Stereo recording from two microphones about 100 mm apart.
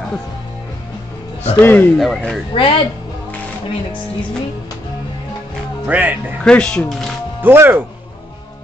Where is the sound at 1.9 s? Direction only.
Centre (ahead or behind).